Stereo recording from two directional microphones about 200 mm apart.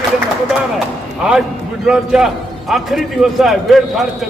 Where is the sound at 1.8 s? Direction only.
Centre (ahead or behind).